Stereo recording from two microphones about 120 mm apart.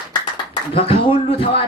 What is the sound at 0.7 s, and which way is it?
Speech, 50° left (ahead or behind).